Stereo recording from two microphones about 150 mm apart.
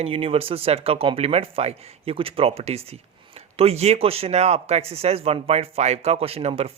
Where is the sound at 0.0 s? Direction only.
40° right (ahead or behind).